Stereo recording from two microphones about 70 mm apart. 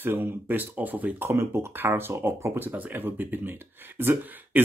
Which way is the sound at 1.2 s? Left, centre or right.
Right.